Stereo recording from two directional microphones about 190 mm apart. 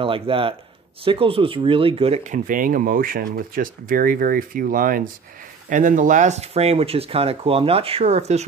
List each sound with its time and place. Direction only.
0.0 s speech: 30° right (ahead or behind)